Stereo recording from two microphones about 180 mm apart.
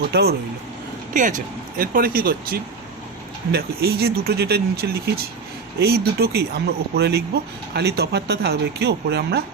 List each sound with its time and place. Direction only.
0.1 s speech: 60° right (ahead or behind)
1.1 s speech: 45° right (ahead or behind); by 9.4 s 65° right (ahead or behind)